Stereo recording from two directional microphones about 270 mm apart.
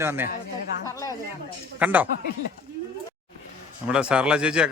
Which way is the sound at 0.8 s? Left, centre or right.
Centre.